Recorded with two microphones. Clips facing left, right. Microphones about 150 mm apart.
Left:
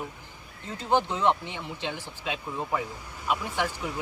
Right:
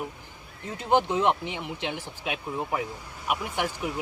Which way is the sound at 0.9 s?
15° right (ahead or behind).